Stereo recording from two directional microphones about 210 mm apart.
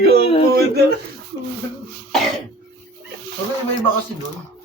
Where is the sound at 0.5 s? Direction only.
50° right (ahead or behind).